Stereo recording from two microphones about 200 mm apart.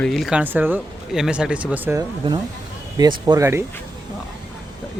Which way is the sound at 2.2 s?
25° right (ahead or behind).